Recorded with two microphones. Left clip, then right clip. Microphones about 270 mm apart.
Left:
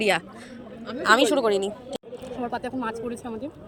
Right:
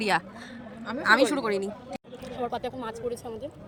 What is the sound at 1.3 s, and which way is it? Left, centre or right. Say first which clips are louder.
Speech: left 6 dB; centre.